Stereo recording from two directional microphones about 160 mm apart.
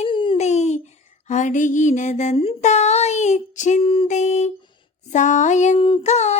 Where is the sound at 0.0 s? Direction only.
35° left (ahead or behind).